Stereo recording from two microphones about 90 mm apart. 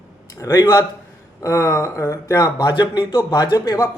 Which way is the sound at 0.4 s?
45° left (ahead or behind).